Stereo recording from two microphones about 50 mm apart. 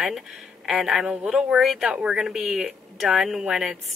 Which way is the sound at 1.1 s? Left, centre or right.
Centre.